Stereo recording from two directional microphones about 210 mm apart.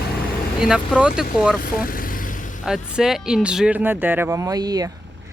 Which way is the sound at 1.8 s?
40° left (ahead or behind).